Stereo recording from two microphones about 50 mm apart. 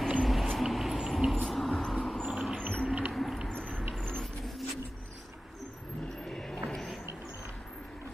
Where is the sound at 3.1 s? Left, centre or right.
Centre.